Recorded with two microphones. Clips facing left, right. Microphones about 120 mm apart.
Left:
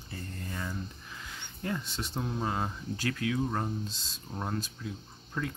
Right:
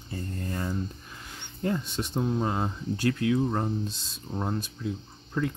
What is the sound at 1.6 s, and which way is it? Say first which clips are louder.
Speech: right 6 dB; 25° right (ahead or behind).